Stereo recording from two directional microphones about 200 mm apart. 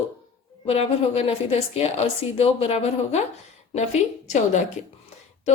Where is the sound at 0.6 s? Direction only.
30° left (ahead or behind).